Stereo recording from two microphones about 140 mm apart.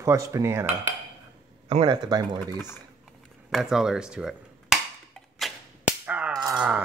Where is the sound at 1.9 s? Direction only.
30° right (ahead or behind).